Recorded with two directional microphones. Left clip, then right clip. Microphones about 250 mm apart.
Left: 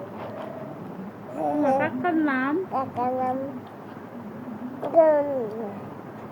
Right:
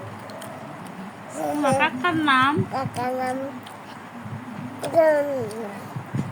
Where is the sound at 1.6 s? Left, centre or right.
Right.